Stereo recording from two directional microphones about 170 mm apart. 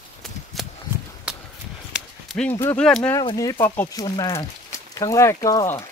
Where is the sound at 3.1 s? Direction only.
20° left (ahead or behind).